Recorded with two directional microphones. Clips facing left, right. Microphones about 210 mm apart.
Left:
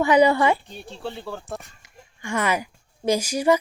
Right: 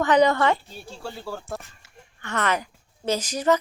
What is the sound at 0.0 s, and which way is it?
Speech, 10° left (ahead or behind).